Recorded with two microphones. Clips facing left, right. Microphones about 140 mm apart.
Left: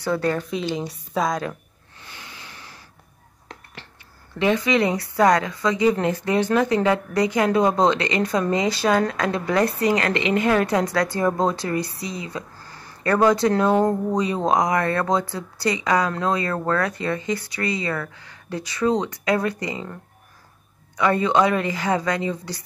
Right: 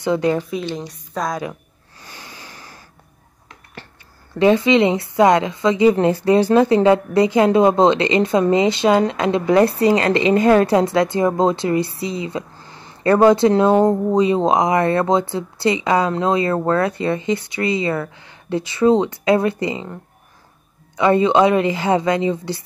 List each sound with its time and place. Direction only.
0.0 s a woman's voice: 20° right (ahead or behind)
0.5 s a woman's voice: centre (ahead or behind)
2.0 s snort: 40° right (ahead or behind)
4.4 s speech: 30° right (ahead or behind)